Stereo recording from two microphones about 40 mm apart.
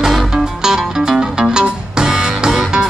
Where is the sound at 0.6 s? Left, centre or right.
Centre.